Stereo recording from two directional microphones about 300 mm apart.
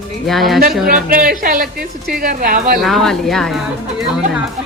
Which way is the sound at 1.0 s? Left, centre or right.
Right.